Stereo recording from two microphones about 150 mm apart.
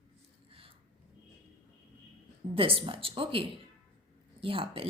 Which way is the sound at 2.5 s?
40° right (ahead or behind).